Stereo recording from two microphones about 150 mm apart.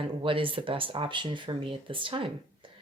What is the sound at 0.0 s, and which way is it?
Speech, 35° right (ahead or behind).